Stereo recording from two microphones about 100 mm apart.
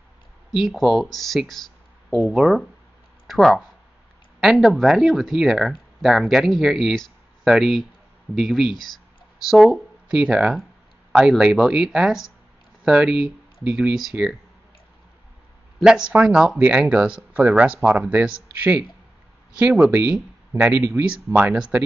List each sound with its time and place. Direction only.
0.5 s speech: centre (ahead or behind)
15.8 s speech: 5° right (ahead or behind)